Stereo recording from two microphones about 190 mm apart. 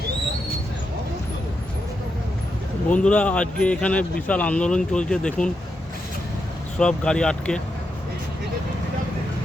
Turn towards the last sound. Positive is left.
turn(degrees=5)  # may be behind; listen again after turning